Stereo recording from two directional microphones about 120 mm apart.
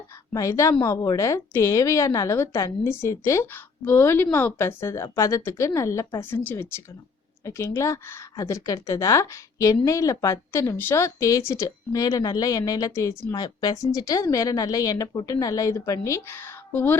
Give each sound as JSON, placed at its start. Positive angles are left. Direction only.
{"t": 0.3, "sound": "speech", "side_deg": 25}